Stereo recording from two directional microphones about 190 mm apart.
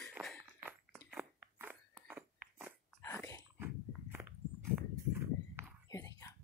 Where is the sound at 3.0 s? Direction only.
15° left (ahead or behind).